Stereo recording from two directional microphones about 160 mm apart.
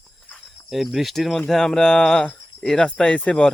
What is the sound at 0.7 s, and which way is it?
Speech, centre (ahead or behind).